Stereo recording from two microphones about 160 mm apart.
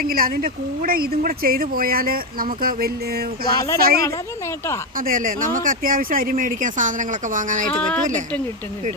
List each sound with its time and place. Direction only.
0.0 s speech: 65° right (ahead or behind)
7.7 s speech: 5° left (ahead or behind)